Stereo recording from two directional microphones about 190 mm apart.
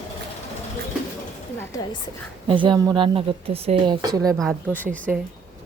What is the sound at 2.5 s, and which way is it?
Speech, 25° right (ahead or behind).